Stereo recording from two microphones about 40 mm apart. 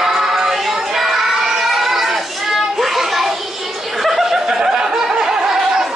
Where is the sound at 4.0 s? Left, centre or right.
Centre.